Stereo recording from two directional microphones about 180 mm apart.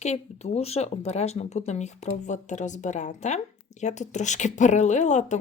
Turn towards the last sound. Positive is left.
turn(degrees=40)  # may be behind; listen again after turning